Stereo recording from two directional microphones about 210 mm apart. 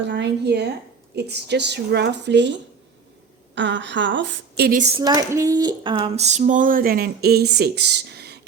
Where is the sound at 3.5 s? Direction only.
60° right (ahead or behind).